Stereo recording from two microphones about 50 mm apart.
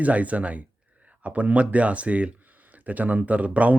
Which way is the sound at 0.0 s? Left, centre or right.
Right.